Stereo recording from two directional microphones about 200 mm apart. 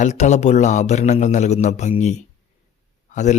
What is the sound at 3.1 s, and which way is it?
Speech, 35° left (ahead or behind).